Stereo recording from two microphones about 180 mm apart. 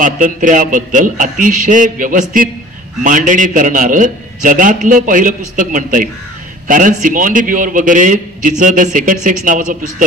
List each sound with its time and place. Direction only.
0.0 s a man's voice: 45° right (ahead or behind)